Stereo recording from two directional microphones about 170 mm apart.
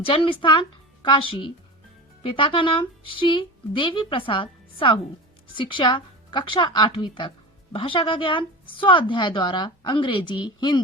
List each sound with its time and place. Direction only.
0.0 s a woman's voice: 30° left (ahead or behind)